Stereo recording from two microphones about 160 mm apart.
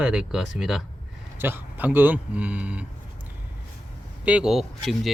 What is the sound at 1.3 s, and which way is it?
Speech, 15° right (ahead or behind).